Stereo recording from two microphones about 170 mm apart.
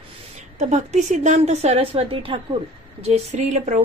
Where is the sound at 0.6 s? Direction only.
45° right (ahead or behind).